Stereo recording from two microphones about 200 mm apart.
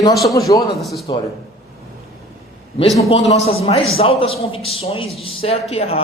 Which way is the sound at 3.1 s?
30° left (ahead or behind).